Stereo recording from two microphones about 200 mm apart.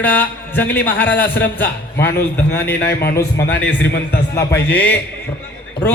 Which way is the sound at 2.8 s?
55° left (ahead or behind).